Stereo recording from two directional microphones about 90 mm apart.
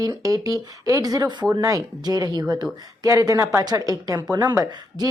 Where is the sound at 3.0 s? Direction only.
40° right (ahead or behind).